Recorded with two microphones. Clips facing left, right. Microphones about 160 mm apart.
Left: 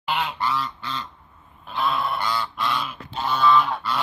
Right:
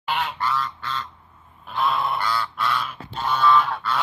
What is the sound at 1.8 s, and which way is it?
Goose, centre (ahead or behind).